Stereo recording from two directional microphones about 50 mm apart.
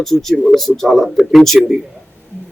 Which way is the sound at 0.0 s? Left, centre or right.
Centre.